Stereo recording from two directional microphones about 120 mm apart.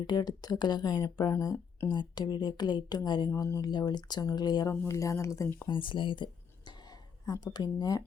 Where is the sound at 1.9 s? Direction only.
40° left (ahead or behind).